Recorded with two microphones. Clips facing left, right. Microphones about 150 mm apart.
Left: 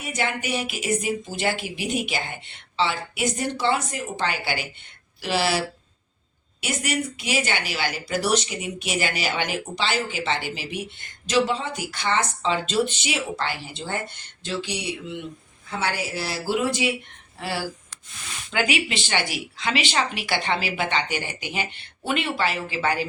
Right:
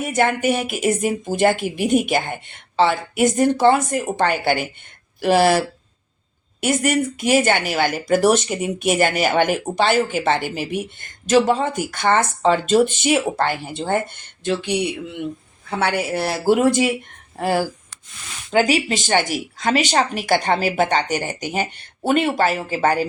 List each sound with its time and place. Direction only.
0.0 s speech: 50° right (ahead or behind)